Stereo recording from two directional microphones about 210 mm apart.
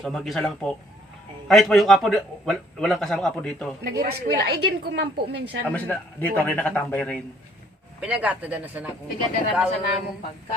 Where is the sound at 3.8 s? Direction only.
50° right (ahead or behind).